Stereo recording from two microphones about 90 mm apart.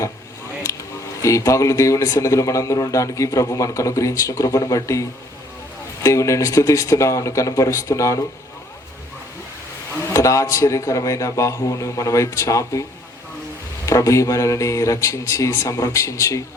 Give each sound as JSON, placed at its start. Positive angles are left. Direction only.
{"t": 0.6, "sound": "speech", "side_deg": 35}
{"t": 10.1, "sound": "speech", "side_deg": 35}
{"t": 13.8, "sound": "speech", "side_deg": 35}